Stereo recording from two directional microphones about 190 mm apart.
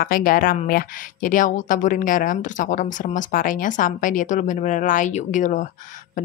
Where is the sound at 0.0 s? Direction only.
50° left (ahead or behind).